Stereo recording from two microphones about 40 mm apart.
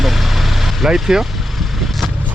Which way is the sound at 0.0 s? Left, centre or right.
Centre.